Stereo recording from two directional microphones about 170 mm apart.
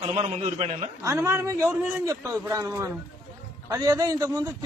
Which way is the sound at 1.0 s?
15° right (ahead or behind).